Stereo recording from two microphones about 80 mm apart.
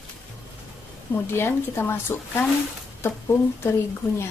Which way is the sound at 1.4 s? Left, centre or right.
Left.